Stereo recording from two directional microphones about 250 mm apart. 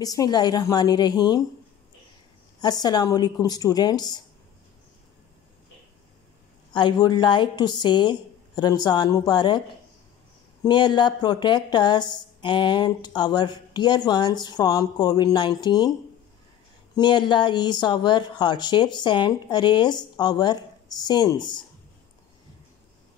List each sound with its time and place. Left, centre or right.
0.0 s a woman's voice: centre
2.6 s a woman's voice: centre
6.7 s a woman's voice: centre
10.6 s a woman's voice: centre
16.9 s a woman's voice: centre